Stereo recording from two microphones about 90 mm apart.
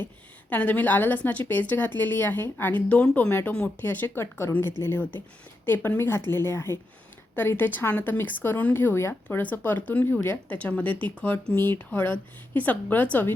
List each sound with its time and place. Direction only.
0.5 s speech: 20° left (ahead or behind)